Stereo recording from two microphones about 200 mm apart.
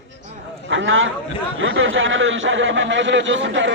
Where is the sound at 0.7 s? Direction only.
70° right (ahead or behind).